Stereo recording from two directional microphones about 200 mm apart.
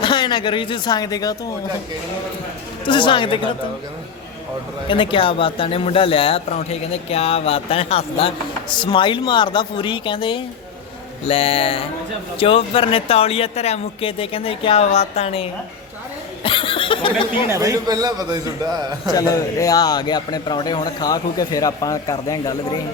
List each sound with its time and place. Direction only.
0.0 s a man's voice: 25° left (ahead or behind)
2.8 s a man's voice: 25° left (ahead or behind)
4.9 s a man's voice: 25° left (ahead or behind)
16.4 s a sound: 25° left (ahead or behind)
17.5 s a man's voice: 15° right (ahead or behind)
19.1 s a man's voice: 15° left (ahead or behind)